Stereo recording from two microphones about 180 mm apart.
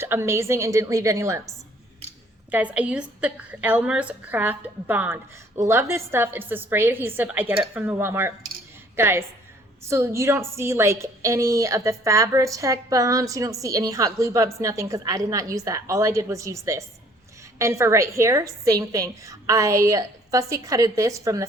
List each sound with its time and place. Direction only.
0.0 s a woman's voice: 15° right (ahead or behind)
2.5 s a woman's voice: 10° right (ahead or behind)